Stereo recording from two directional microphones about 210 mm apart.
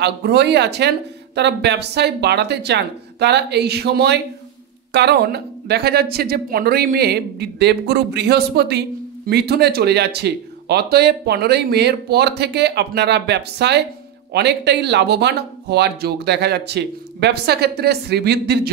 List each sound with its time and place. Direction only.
0.0 s speech: 50° right (ahead or behind)